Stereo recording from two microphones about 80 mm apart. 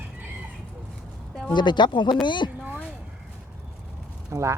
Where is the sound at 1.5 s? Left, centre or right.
Left.